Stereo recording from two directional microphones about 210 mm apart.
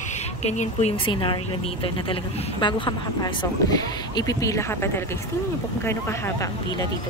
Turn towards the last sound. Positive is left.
turn(degrees=15)  # may be behind; listen again after turning